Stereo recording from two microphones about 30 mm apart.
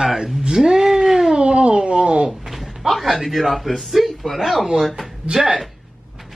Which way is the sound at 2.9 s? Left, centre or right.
Centre.